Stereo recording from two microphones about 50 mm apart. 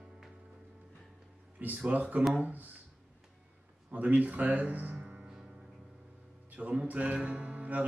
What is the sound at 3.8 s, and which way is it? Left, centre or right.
Speech, right.